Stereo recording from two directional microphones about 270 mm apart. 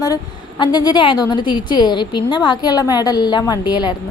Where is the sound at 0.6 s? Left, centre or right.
Centre.